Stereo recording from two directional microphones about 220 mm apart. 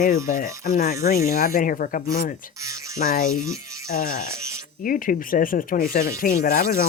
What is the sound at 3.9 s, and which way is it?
Speech, 40° left (ahead or behind).